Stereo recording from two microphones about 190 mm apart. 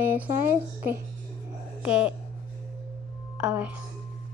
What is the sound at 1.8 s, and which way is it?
Speech, 5° right (ahead or behind).